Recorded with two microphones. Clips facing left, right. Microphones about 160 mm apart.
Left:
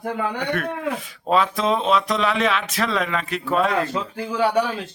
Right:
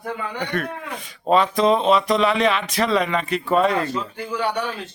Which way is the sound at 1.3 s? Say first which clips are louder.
Right 3 dB; centre (ahead or behind).